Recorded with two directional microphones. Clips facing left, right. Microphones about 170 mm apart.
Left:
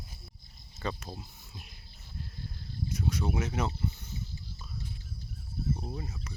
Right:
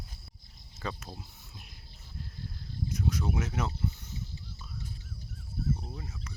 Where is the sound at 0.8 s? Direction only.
Centre (ahead or behind).